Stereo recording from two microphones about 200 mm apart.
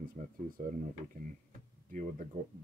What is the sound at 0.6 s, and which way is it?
Speech, 45° right (ahead or behind).